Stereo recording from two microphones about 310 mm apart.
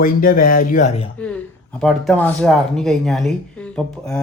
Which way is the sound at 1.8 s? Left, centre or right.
Centre.